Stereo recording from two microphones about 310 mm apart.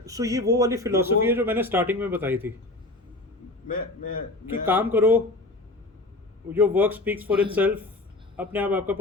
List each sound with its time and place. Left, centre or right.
0.0 s speech: centre
3.7 s a man's voice: left
4.6 s speech: centre
6.5 s a man's voice: centre